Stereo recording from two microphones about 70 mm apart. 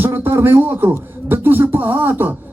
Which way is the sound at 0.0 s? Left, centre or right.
Right.